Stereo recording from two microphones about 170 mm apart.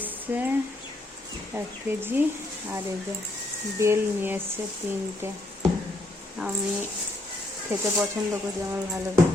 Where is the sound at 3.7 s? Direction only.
15° right (ahead or behind).